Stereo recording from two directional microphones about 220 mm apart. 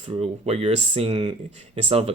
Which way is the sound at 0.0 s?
25° right (ahead or behind).